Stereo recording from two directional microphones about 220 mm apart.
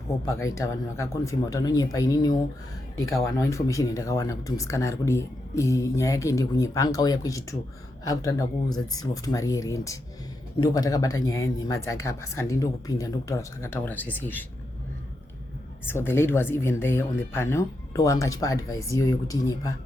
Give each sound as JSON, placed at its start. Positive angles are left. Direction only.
{"t": 0.5, "sound": "speech", "side_deg": 15}
{"t": 15.9, "sound": "speech", "side_deg": 10}